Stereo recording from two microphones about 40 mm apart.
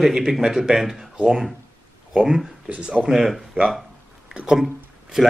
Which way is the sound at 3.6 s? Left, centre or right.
Right.